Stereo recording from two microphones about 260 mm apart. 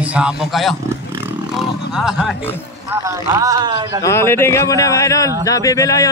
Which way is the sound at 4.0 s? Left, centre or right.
Centre.